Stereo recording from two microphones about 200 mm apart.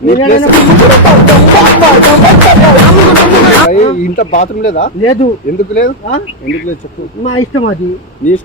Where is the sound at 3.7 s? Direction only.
35° left (ahead or behind).